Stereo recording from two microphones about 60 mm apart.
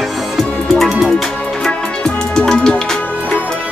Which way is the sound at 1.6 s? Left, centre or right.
Centre.